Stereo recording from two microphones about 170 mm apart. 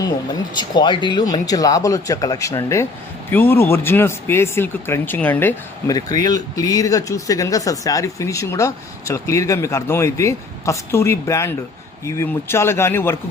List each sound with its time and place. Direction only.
0.5 s speech: 25° left (ahead or behind)
5.9 s speech: 20° left (ahead or behind)